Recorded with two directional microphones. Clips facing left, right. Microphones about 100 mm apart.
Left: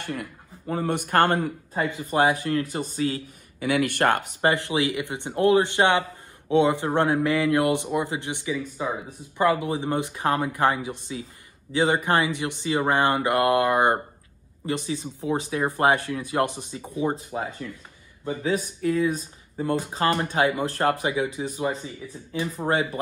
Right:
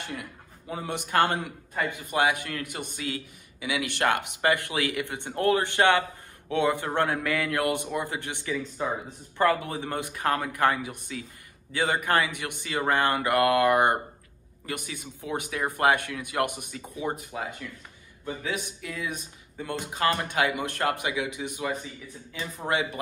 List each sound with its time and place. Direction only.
0.0 s a man's voice: 50° left (ahead or behind)
2.0 s speech: 35° left (ahead or behind)
3.5 s speech: 50° left (ahead or behind)
4.4 s a man's voice: 25° left (ahead or behind)
18.2 s speech: 35° left (ahead or behind)